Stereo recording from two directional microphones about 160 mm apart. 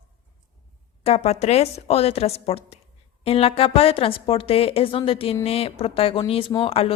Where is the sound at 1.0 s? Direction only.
40° left (ahead or behind).